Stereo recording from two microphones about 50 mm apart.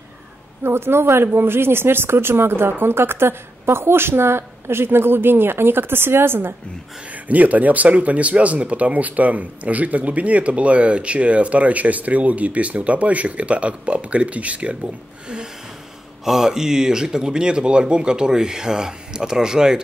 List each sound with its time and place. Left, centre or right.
0.7 s speech: right
7.2 s speech: right
16.3 s speech: centre